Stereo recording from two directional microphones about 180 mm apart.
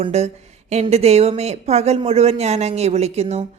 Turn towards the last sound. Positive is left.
turn(degrees=-35)  # may be behind; listen again after turning